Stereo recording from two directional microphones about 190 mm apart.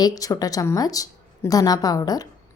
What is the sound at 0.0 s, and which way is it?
Speech, 20° left (ahead or behind).